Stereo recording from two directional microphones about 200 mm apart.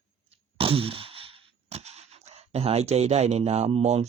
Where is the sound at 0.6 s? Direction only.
25° right (ahead or behind).